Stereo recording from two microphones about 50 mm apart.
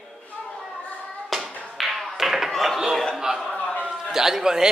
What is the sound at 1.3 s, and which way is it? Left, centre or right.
Tap, centre.